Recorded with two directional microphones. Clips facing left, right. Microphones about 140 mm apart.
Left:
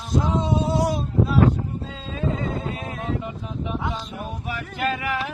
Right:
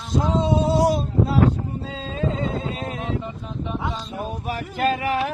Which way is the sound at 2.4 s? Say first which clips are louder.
Right 2 dB; 25° right (ahead or behind).